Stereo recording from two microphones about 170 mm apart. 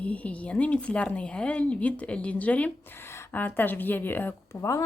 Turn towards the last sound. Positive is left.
turn(degrees=15)  # may be behind; listen again after turning